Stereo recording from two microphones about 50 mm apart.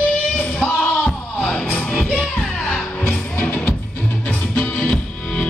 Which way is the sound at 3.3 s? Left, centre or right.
Left.